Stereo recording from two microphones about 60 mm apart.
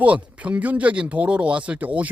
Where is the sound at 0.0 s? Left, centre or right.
Right.